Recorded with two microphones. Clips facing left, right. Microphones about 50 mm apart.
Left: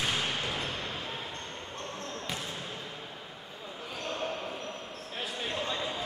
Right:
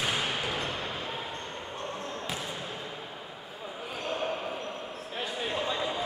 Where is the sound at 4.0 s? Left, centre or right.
Centre.